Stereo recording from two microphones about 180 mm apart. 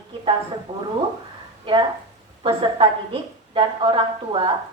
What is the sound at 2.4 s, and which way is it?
A woman's voice, 30° right (ahead or behind).